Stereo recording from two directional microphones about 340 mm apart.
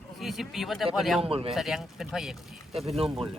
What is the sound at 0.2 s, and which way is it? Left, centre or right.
Speech, centre.